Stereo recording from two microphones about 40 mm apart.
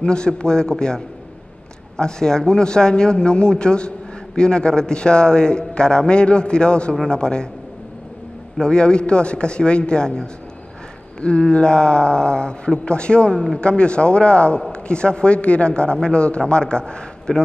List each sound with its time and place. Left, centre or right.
0.0 s a man's voice: left
8.5 s a man's voice: left